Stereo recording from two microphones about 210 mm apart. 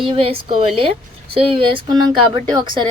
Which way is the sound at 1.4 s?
25° right (ahead or behind).